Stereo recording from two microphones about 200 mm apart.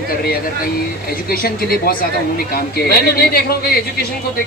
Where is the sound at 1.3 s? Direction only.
50° left (ahead or behind).